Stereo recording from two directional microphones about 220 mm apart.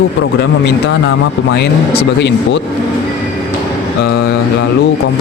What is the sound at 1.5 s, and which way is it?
Speech, 50° left (ahead or behind).